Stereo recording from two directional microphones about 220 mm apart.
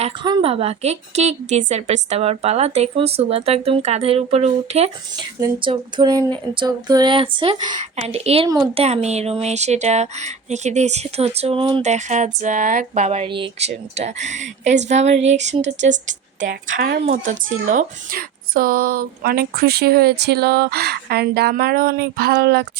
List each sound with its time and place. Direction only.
0.0 s a woman's voice: 20° right (ahead or behind); by 17.1 s 50° right (ahead or behind)
17.1 s speech: 40° right (ahead or behind)